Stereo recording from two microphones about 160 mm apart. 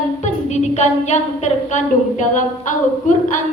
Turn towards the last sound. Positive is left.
turn(degrees=50)  # may be behind; listen again after turning